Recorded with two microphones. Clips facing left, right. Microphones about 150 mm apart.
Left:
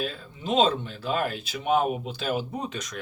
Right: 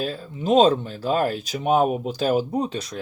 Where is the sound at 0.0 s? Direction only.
35° right (ahead or behind).